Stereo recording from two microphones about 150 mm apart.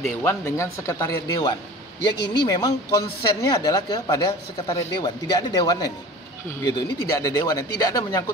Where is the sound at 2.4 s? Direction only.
25° left (ahead or behind).